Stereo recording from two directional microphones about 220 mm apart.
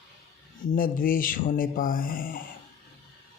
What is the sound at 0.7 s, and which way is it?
Speech, 40° left (ahead or behind).